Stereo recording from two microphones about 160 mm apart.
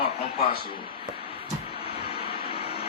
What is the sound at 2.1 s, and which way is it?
Vehicle, 35° left (ahead or behind).